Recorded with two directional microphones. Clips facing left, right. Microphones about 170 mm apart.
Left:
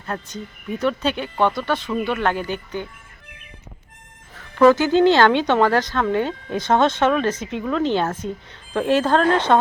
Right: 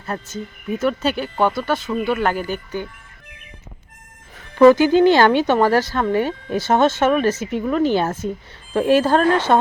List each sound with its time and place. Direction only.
0.0 s speech: 5° right (ahead or behind)
4.5 s speech: 15° right (ahead or behind)